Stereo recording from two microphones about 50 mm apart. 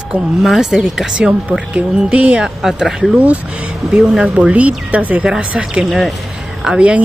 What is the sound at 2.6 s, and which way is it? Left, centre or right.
Speech, centre.